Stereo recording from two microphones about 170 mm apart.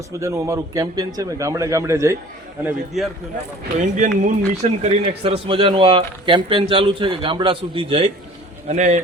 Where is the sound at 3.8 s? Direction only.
45° right (ahead or behind).